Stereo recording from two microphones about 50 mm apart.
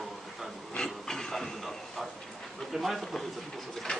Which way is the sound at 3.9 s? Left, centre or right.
Centre.